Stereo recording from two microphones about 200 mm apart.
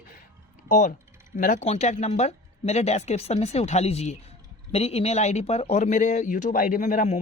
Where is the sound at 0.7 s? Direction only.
40° left (ahead or behind).